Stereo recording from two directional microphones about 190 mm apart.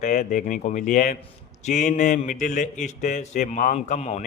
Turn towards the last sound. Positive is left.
turn(degrees=35)  # may be behind; listen again after turning